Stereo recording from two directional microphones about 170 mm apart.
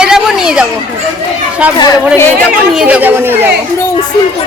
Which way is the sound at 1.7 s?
25° left (ahead or behind).